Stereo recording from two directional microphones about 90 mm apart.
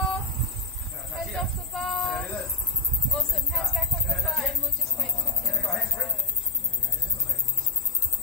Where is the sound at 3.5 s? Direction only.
Centre (ahead or behind).